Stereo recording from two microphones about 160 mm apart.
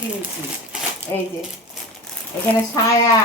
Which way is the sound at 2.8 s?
25° left (ahead or behind).